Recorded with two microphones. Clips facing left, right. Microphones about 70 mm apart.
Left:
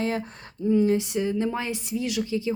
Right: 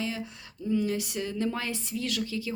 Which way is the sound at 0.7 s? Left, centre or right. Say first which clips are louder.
Left 7 dB; left.